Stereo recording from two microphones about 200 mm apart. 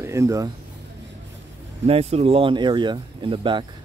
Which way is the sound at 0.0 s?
15° right (ahead or behind).